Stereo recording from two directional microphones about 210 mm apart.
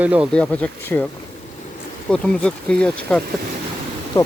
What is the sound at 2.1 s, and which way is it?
Speech, 5° left (ahead or behind).